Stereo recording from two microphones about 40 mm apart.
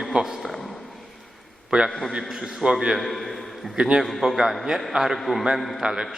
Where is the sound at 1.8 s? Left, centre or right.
Centre.